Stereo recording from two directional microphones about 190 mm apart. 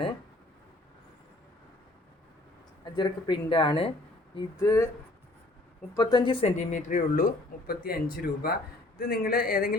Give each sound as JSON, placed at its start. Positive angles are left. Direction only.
{"t": 2.8, "sound": "speech", "side_deg": 25}
{"t": 4.4, "sound": "speech", "side_deg": 15}
{"t": 5.9, "sound": "speech", "side_deg": 20}